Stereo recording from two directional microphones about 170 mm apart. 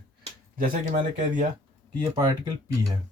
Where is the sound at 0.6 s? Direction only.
50° right (ahead or behind).